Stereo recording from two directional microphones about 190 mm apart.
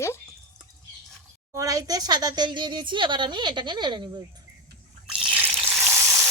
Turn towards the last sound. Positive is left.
turn(degrees=-15)  # may be behind; listen again after turning